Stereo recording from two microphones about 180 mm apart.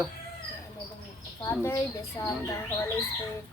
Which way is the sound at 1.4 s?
15° left (ahead or behind).